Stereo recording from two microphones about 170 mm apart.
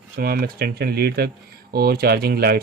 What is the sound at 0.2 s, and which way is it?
Speech, 60° right (ahead or behind).